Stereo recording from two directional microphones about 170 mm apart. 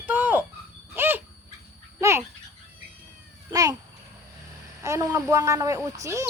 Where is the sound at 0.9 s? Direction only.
10° right (ahead or behind).